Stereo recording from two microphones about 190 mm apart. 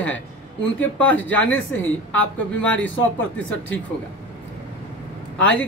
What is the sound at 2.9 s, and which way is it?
Speech, 90° left.